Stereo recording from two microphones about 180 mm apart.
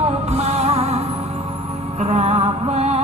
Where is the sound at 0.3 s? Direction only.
35° right (ahead or behind).